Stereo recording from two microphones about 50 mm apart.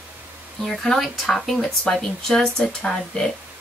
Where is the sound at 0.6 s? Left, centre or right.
Centre.